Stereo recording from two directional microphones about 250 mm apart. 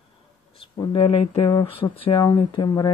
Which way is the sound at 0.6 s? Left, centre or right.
Centre.